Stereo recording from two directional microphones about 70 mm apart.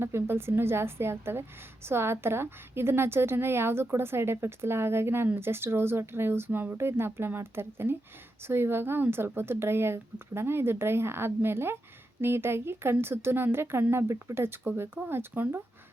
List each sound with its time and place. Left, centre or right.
0.0 s a woman's voice: right